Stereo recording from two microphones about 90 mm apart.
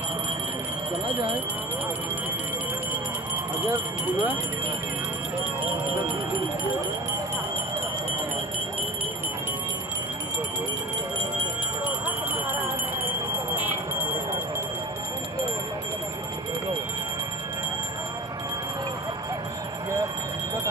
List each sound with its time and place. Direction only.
3.6 s speech: 25° right (ahead or behind)